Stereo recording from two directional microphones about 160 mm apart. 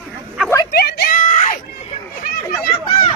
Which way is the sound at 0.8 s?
80° left.